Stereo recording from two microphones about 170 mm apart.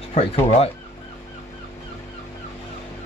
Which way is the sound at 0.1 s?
40° left (ahead or behind).